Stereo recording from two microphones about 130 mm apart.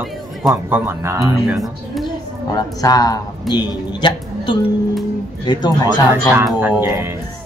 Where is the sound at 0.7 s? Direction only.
15° right (ahead or behind).